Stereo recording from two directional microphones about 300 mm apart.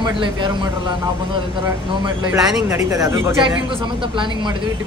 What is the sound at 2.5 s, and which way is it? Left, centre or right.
Speech, centre.